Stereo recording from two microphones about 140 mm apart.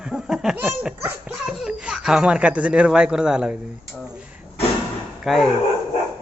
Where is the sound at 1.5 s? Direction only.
5° right (ahead or behind).